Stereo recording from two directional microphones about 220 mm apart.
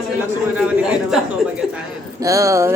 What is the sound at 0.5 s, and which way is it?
A man's voice, 5° right (ahead or behind).